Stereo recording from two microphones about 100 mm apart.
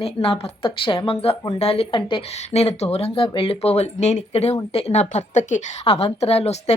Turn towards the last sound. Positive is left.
turn(degrees=90)